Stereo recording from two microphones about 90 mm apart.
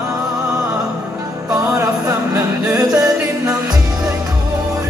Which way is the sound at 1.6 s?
30° right (ahead or behind).